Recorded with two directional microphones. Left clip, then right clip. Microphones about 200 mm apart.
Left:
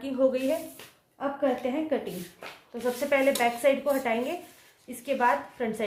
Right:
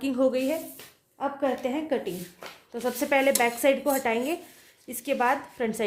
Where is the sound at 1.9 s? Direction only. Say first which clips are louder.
Right 1 dB; 60° right (ahead or behind).